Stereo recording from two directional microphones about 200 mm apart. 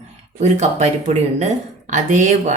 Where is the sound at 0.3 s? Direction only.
35° right (ahead or behind).